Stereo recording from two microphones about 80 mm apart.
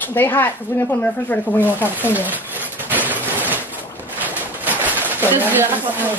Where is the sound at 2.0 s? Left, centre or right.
Right.